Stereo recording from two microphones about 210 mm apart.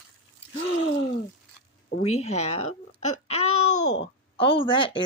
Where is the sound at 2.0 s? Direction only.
30° left (ahead or behind).